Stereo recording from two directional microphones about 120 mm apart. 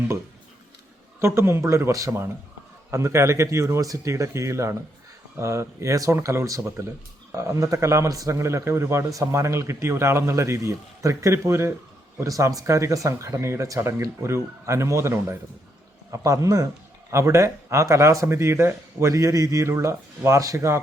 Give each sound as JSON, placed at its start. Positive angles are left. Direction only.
{"t": 1.2, "sound": "a man's voice", "side_deg": -20}